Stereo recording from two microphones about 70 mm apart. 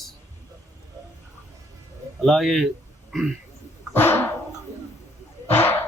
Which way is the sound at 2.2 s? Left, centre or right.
Centre.